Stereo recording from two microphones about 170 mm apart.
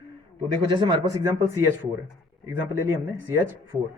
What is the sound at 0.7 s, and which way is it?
Speech, 25° right (ahead or behind).